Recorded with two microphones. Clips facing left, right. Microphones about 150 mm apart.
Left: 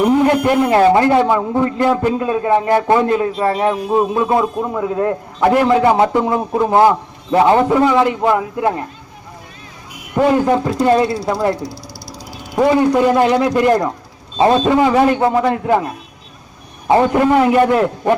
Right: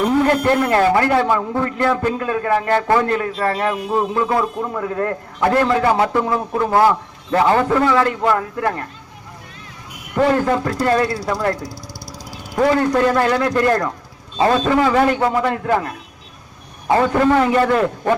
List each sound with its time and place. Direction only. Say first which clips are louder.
0.0 s a man's voice: left 3 dB; 15° left (ahead or behind)
10.2 s a man's voice: left 3 dB; 15° left (ahead or behind)